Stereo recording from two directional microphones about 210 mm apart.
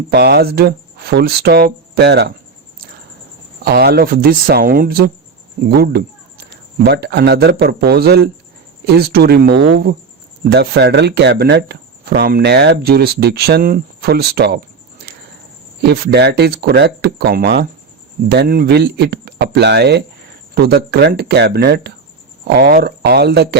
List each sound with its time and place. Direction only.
0.1 s speech: 50° right (ahead or behind)
3.6 s speech: 50° right (ahead or behind)